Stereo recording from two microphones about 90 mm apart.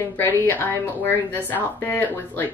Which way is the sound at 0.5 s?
25° left (ahead or behind).